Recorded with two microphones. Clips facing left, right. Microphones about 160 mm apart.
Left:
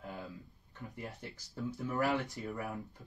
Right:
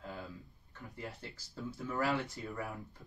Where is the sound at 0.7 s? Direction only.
15° left (ahead or behind).